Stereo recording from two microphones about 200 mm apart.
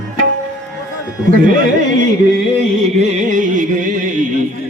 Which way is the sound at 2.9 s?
40° right (ahead or behind).